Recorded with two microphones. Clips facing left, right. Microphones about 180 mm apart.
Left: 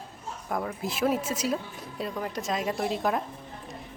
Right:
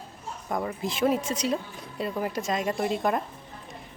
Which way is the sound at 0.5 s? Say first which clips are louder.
Right 1 dB; 5° left (ahead or behind).